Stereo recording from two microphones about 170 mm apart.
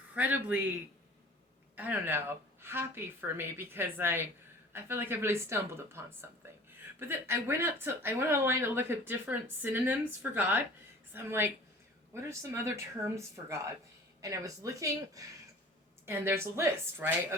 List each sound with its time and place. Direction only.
0.1 s speech: 10° right (ahead or behind)
1.7 s speech: 10° right (ahead or behind)